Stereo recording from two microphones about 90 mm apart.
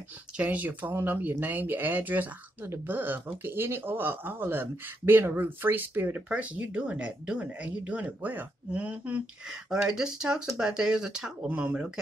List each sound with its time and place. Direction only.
0.4 s speech: 15° right (ahead or behind)